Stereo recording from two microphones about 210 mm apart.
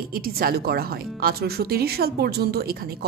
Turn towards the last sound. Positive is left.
turn(degrees=-45)  # may be behind; listen again after turning